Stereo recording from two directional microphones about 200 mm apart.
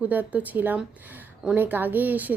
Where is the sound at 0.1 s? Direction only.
10° right (ahead or behind).